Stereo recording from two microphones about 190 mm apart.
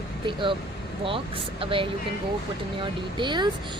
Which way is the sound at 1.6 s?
30° right (ahead or behind).